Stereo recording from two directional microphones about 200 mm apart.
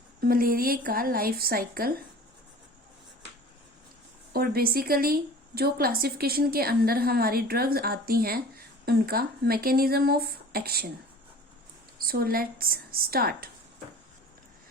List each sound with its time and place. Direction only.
0.2 s a woman's voice: 45° right (ahead or behind)
4.3 s a woman's voice: 50° right (ahead or behind)
11.9 s a woman's voice: 50° right (ahead or behind)